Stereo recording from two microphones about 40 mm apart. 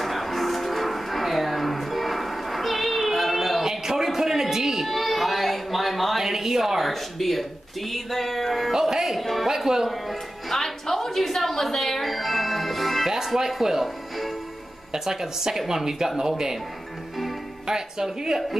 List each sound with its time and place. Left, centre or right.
0.0 s music: centre
3.6 s a sound: centre
8.7 s music: centre
14.9 s speech: centre
17.6 s a woman's voice: centre